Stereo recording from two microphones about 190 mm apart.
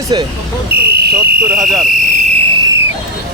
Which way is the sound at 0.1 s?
25° right (ahead or behind).